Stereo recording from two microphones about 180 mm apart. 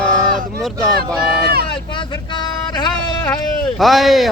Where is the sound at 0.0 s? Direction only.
Centre (ahead or behind).